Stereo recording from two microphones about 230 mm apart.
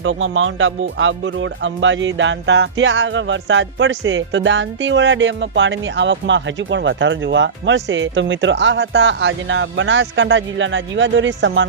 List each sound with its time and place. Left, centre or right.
0.0 s speech: right